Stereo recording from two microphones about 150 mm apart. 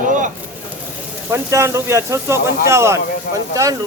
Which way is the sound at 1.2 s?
15° right (ahead or behind).